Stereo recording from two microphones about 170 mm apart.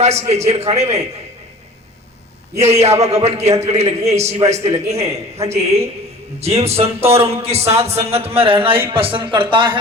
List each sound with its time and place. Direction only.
0.0 s a man's voice: 40° right (ahead or behind)
2.6 s a man's voice: 40° right (ahead or behind)